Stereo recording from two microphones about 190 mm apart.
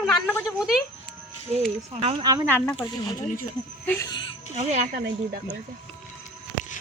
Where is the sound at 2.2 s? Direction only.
20° right (ahead or behind).